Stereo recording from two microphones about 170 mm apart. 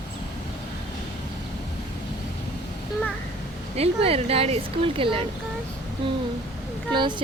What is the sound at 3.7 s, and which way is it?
Speech, 35° right (ahead or behind).